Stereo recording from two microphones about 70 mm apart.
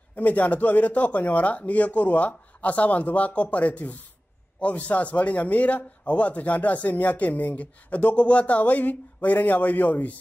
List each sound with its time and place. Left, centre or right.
0.1 s a man's voice: left